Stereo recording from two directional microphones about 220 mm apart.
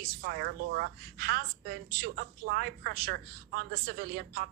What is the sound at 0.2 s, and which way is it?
A woman's voice, 45° right (ahead or behind).